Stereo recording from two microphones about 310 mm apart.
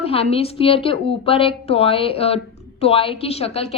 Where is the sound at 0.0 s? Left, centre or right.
Centre.